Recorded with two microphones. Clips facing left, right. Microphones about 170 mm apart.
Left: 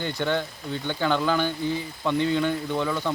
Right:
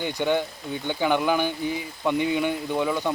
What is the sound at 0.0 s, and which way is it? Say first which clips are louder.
Speech: right 2 dB; 15° right (ahead or behind).